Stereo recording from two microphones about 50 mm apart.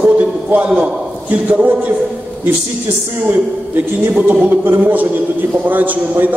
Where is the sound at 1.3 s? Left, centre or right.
Right.